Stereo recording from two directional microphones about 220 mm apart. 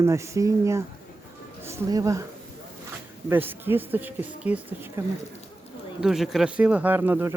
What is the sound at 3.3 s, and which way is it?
Speech, 10° right (ahead or behind).